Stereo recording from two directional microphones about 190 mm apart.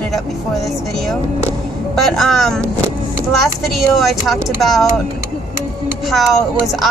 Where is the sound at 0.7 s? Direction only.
Centre (ahead or behind).